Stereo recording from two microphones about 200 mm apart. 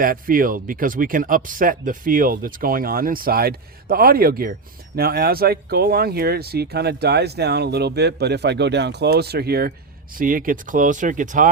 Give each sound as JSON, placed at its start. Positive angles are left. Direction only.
{"t": 0.0, "sound": "speech", "side_deg": -45}